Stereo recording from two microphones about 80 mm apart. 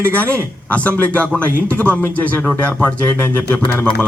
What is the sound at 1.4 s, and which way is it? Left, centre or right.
Speech, right.